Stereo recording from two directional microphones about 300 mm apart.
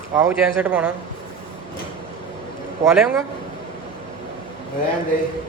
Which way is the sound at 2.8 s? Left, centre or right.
Centre.